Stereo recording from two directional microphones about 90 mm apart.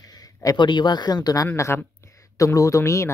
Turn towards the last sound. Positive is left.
turn(degrees=35)  # may be behind; listen again after turning